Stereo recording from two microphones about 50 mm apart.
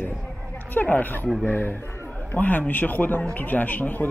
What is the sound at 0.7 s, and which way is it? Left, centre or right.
A man's voice, left.